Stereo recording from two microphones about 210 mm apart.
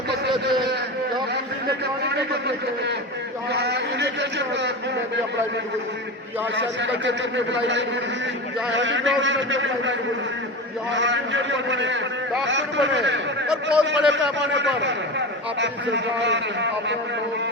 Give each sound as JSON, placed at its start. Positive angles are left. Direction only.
{"t": 3.5, "sound": "a sound", "side_deg": -55}
{"t": 6.6, "sound": "a man's voice", "side_deg": -60}
{"t": 10.9, "sound": "a man's voice", "side_deg": -60}
{"t": 13.5, "sound": "a man's voice", "side_deg": -5}
{"t": 15.6, "sound": "a man's voice", "side_deg": -55}